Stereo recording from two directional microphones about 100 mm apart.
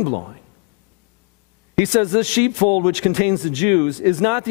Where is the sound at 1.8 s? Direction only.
5° right (ahead or behind).